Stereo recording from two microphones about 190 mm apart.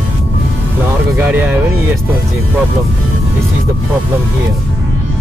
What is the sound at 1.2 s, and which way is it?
Speech, 10° right (ahead or behind).